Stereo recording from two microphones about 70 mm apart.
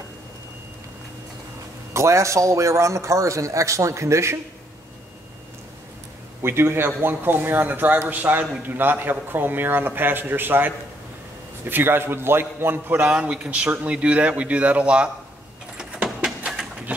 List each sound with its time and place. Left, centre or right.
2.0 s a man's voice: right
6.4 s a man's voice: right
13.1 s a man's voice: centre
15.8 s vehicle: centre